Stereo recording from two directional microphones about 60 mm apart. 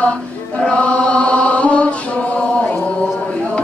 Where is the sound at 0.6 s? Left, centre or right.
Centre.